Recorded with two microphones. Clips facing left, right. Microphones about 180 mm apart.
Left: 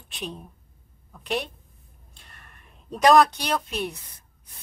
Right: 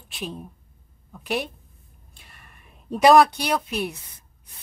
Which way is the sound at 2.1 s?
5° right (ahead or behind).